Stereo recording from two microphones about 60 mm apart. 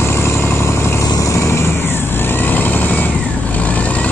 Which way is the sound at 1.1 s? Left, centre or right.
Left.